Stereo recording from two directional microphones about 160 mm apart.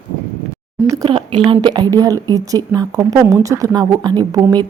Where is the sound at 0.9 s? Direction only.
25° right (ahead or behind).